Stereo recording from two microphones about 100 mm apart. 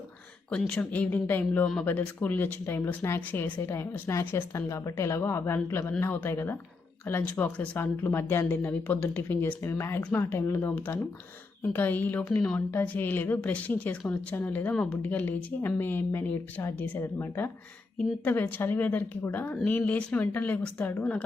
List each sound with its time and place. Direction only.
0.8 s speech: 15° left (ahead or behind)
4.1 s a woman's voice: 30° left (ahead or behind); by 21.2 s 15° left (ahead or behind)